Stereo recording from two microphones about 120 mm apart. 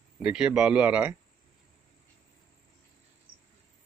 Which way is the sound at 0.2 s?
10° right (ahead or behind).